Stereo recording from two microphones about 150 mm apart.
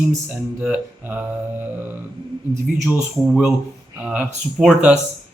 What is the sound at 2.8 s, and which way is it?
A man's voice, 5° right (ahead or behind).